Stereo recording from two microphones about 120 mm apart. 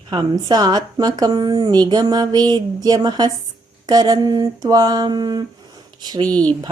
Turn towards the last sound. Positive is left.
turn(degrees=10)  # may be behind; listen again after turning